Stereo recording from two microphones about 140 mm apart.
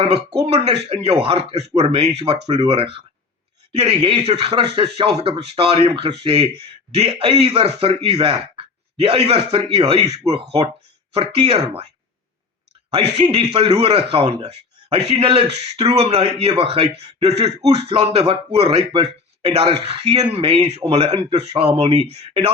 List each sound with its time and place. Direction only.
0.4 s speech: 45° right (ahead or behind)
12.9 s speech: 45° right (ahead or behind)